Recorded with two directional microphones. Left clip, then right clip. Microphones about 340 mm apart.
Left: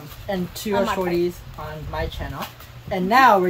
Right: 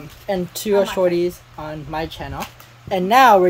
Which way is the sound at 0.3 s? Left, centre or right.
Right.